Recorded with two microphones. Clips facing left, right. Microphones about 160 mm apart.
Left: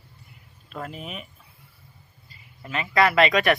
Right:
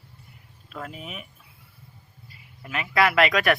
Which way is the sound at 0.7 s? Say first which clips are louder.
Left 2 dB; centre (ahead or behind).